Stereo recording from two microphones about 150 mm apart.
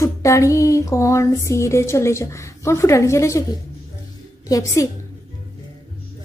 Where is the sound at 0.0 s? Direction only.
20° left (ahead or behind).